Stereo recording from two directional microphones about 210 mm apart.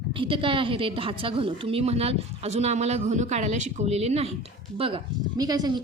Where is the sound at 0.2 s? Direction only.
25° right (ahead or behind).